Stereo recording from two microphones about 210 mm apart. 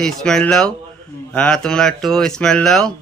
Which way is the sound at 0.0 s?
5° left (ahead or behind).